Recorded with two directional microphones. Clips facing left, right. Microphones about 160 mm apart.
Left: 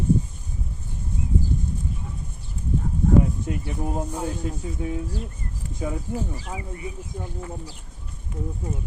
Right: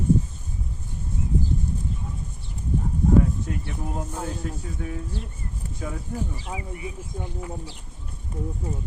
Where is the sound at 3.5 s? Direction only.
25° left (ahead or behind).